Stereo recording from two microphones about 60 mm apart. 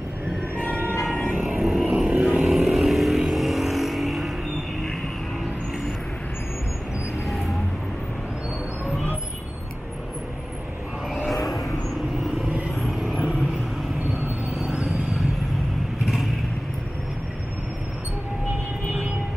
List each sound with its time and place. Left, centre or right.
0.7 s a sound: right
1.8 s vehicle: centre
11.2 s vehicle: centre
12.7 s vehicle: centre
14.6 s vehicle: centre